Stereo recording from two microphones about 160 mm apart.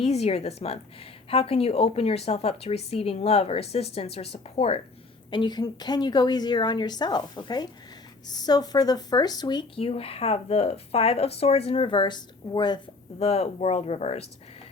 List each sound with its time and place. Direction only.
0.0 s a woman's voice: 40° left (ahead or behind)